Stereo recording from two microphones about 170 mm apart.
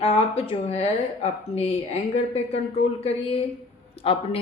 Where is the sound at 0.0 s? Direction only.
35° left (ahead or behind).